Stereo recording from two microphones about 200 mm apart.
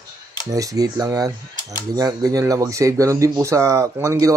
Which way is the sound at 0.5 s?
15° right (ahead or behind).